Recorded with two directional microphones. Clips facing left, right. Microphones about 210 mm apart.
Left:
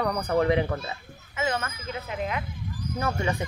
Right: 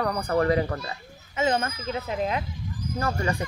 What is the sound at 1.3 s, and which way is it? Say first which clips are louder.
Speech: right 4 dB; 30° right (ahead or behind).